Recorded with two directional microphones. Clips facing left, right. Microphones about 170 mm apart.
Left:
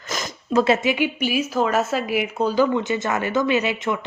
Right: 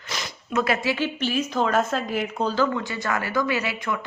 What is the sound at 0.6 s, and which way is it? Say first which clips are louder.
Speech: left 5 dB; 25° left (ahead or behind).